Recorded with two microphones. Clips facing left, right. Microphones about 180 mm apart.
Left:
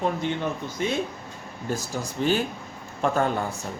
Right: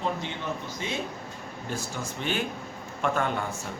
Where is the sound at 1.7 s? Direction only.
35° left (ahead or behind).